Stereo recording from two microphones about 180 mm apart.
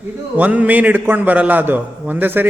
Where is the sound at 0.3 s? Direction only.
10° right (ahead or behind).